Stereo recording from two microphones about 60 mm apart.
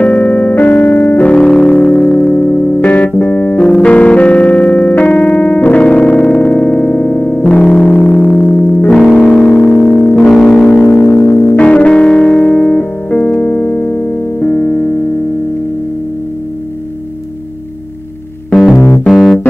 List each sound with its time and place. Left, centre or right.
0.0 s keyboard: left
1.3 s music: centre
3.2 s keyboard: left
8.9 s music: centre
9.8 s music: left
10.2 s music: centre
11.1 s music: left
11.5 s music: left
13.4 s keyboard: left
18.5 s music: centre
19.0 s keyboard: centre